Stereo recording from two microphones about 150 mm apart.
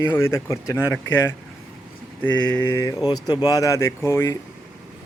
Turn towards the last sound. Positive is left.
turn(degrees=20)  # may be behind; listen again after turning